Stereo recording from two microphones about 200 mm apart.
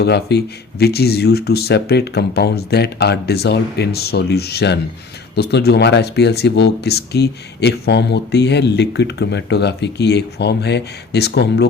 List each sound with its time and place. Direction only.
0.0 s speech: 55° left (ahead or behind)